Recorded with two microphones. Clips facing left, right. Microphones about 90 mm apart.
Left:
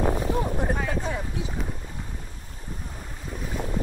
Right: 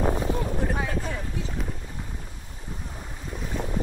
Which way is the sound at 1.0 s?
20° left (ahead or behind).